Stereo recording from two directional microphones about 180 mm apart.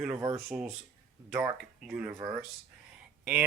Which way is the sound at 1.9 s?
5° right (ahead or behind).